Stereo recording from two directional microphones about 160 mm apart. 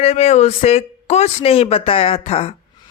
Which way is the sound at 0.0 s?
40° left (ahead or behind).